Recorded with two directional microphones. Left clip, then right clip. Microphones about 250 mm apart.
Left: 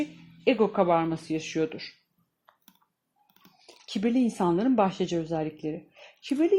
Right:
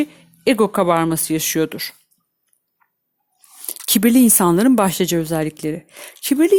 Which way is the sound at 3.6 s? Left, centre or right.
Right.